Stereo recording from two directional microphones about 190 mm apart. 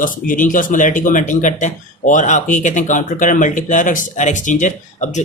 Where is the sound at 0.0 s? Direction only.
45° left (ahead or behind).